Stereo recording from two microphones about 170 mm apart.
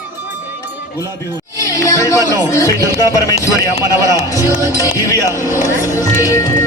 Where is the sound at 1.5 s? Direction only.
20° left (ahead or behind).